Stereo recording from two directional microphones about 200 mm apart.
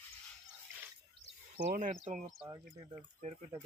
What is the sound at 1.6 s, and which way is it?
Speech, 40° right (ahead or behind).